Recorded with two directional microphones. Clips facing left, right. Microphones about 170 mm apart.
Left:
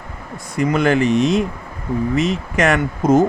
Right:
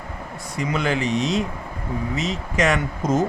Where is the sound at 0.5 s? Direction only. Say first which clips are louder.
Left 7 dB; 55° left (ahead or behind).